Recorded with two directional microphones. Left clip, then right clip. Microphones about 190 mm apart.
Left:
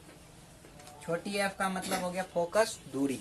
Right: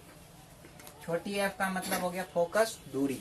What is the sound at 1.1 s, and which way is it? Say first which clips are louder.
Speech: even; 15° left (ahead or behind).